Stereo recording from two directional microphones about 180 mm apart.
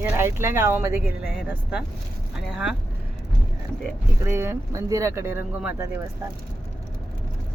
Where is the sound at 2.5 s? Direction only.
5° right (ahead or behind).